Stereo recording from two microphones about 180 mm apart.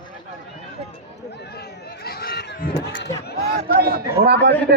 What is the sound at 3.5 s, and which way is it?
Speech, 60° right (ahead or behind).